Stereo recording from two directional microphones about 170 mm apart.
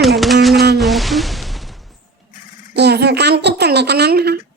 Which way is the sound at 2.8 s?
80° right.